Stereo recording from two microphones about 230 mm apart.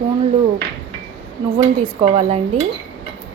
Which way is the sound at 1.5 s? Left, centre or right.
Right.